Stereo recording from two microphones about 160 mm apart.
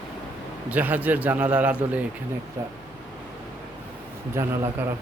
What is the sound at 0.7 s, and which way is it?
A man's voice, 10° right (ahead or behind).